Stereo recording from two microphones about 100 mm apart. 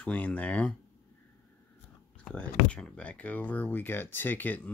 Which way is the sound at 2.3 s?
10° left (ahead or behind).